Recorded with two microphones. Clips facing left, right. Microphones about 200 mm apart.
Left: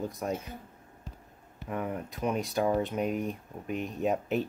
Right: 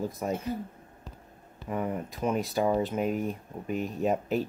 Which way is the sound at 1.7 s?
Centre (ahead or behind).